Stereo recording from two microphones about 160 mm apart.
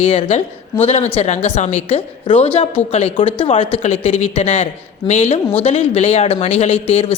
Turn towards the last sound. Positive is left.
turn(degrees=40)  # may be behind; listen again after turning